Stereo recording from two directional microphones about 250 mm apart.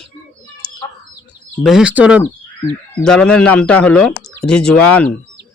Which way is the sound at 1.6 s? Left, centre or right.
Centre.